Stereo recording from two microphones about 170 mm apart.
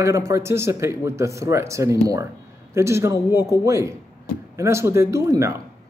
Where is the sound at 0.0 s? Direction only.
15° right (ahead or behind).